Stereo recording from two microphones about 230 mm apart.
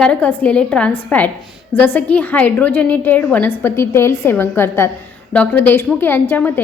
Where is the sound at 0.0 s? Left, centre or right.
Centre.